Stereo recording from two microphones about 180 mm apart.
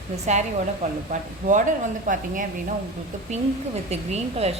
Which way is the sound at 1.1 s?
45° right (ahead or behind).